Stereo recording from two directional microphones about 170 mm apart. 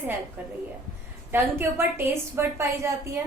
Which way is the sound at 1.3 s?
15° right (ahead or behind).